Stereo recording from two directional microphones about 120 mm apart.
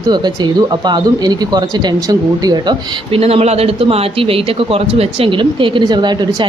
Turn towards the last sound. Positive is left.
turn(degrees=-40)  # may be behind; listen again after turning